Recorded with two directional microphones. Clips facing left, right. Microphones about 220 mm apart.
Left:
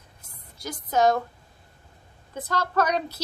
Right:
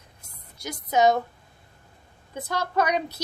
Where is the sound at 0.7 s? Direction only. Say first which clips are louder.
Right 1 dB; 15° right (ahead or behind).